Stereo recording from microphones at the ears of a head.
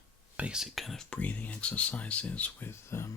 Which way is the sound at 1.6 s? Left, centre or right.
Left.